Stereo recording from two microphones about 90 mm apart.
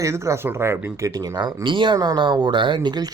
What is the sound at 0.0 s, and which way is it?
Speech, 30° right (ahead or behind).